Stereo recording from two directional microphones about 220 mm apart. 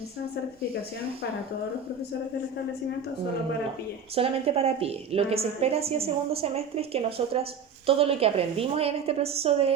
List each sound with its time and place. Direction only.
4.1 s a woman's voice: 25° right (ahead or behind)